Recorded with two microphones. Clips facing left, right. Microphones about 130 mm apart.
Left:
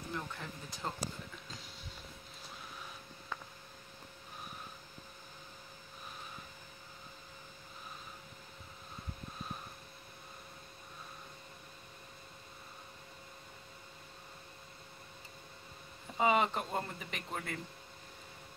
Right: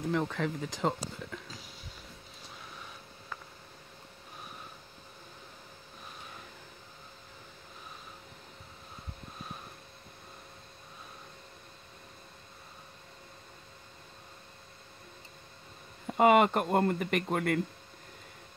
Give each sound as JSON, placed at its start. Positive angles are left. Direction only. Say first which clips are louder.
{"t": 0.1, "sound": "speech", "louder": "right 11 dB", "side_deg": -90}
{"t": 1.0, "sound": "a sound", "louder": "right 3 dB", "side_deg": 0}
{"t": 16.1, "sound": "speech", "louder": "right 8 dB", "side_deg": -65}